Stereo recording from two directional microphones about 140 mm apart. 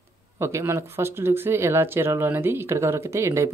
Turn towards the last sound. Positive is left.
turn(degrees=-20)  # may be behind; listen again after turning